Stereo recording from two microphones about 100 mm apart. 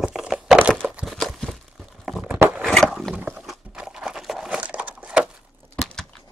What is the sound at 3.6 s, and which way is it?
Crumpling, 5° right (ahead or behind).